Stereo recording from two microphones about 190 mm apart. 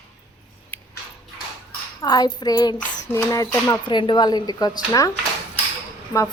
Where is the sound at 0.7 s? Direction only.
10° left (ahead or behind).